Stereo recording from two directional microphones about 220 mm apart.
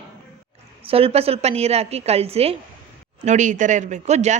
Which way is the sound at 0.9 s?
25° right (ahead or behind).